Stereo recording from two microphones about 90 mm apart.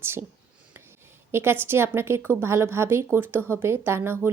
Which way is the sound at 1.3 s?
25° right (ahead or behind).